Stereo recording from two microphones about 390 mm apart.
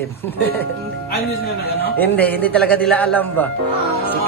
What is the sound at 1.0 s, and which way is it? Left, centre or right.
Speech, left.